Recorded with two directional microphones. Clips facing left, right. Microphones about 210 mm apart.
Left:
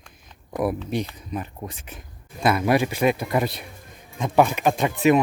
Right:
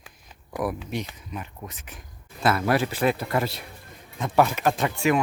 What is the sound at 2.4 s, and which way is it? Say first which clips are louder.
Speech: left 3 dB; 15° left (ahead or behind).